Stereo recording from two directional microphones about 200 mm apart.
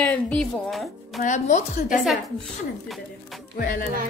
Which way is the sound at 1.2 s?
40° left (ahead or behind).